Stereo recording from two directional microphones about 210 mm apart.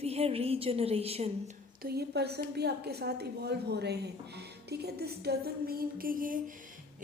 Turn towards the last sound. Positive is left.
turn(degrees=-40)  # may be behind; listen again after turning